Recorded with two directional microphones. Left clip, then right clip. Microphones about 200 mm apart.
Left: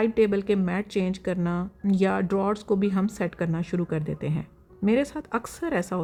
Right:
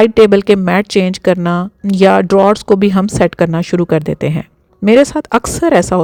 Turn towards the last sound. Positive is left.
turn(degrees=-40)  # may be behind; listen again after turning